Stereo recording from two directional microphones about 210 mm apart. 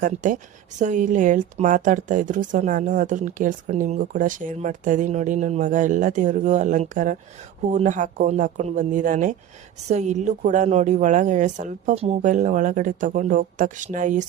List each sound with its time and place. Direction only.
0.0 s a woman's voice: 40° right (ahead or behind)